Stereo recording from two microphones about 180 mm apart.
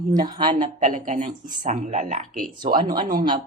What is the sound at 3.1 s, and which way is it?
Speech, 25° right (ahead or behind).